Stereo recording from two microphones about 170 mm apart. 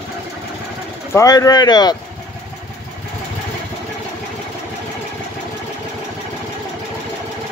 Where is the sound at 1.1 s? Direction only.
20° left (ahead or behind).